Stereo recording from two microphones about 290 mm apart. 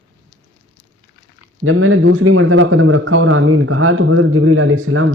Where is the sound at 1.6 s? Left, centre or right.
Right.